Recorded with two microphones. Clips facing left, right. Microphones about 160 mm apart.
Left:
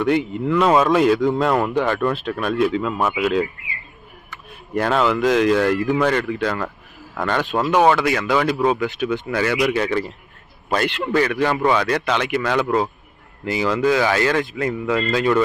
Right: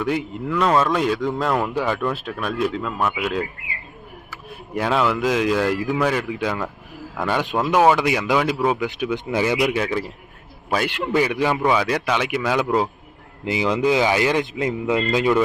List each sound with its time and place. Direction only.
0.0 s speech: centre (ahead or behind)